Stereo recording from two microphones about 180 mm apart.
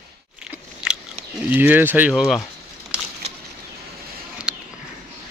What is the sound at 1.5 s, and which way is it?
Speech, 10° right (ahead or behind).